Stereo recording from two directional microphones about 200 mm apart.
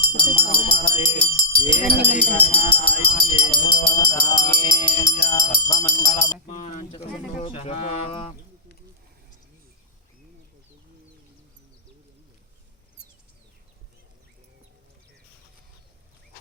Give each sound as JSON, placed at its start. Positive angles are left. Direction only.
{"t": 0.1, "sound": "speech", "side_deg": 25}
{"t": 2.2, "sound": "music", "side_deg": 30}
{"t": 6.5, "sound": "bird", "side_deg": 35}
{"t": 7.4, "sound": "a sound", "side_deg": 30}